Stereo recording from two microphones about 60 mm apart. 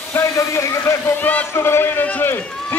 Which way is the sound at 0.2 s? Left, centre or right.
Left.